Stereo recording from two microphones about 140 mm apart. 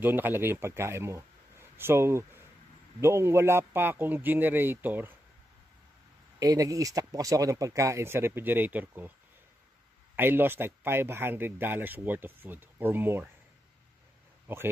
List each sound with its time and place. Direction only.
0.0 s speech: 15° right (ahead or behind)
6.4 s speech: 25° right (ahead or behind)
10.1 s speech: 15° right (ahead or behind)
14.5 s speech: 15° right (ahead or behind)